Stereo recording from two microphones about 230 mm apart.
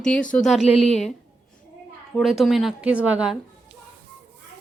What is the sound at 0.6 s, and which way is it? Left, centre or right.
Speech, left.